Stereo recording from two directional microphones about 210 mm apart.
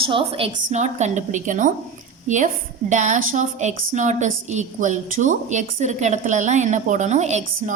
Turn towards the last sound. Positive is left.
turn(degrees=-35)  # may be behind; listen again after turning